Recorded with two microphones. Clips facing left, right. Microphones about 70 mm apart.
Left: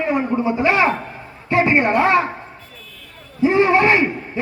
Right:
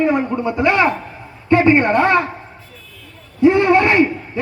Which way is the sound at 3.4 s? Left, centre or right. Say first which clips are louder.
Right 3 dB; right.